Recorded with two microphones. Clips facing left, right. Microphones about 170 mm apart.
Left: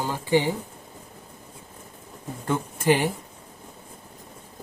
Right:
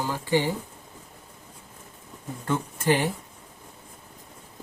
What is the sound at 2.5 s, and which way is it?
Speech, 15° left (ahead or behind).